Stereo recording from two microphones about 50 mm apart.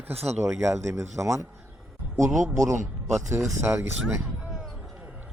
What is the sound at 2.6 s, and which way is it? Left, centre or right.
Speech, right.